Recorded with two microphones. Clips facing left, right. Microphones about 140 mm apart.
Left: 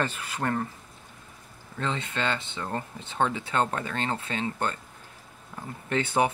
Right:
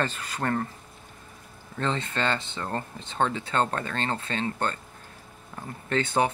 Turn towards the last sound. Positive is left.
turn(degrees=10)  # may be behind; listen again after turning